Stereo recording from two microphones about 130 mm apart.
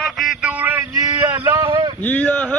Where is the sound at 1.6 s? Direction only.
40° right (ahead or behind).